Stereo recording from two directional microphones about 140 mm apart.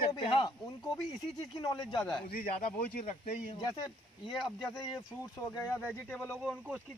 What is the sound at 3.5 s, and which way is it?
Speech, 25° left (ahead or behind).